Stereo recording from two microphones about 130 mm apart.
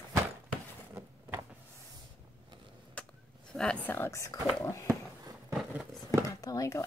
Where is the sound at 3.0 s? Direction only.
10° left (ahead or behind).